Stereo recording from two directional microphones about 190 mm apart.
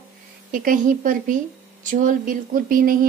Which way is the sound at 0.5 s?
45° right (ahead or behind).